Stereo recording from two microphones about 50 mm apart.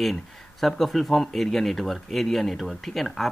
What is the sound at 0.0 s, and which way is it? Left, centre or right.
Speech, centre.